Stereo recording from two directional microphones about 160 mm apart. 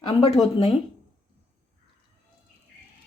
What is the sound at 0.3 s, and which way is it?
Speech, 40° left (ahead or behind).